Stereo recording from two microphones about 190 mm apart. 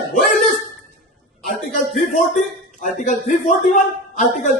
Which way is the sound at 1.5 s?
45° left (ahead or behind).